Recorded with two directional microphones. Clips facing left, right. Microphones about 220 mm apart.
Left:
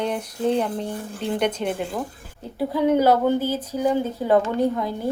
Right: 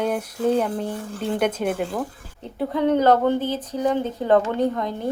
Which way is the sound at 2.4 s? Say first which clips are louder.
Even; 5° left (ahead or behind).